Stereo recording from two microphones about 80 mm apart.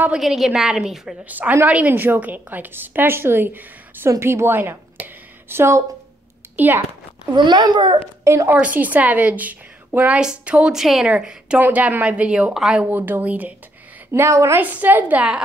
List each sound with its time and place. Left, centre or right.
0.2 s a woman's voice: centre
1.3 s a woman's voice: right
6.5 s a child's voice: right
7.3 s a child's voice: right
8.2 s speech: right
8.5 s a woman's voice: centre
12.5 s speech: centre
12.9 s a woman's voice: right
14.1 s a woman's voice: right
14.6 s a woman's voice: right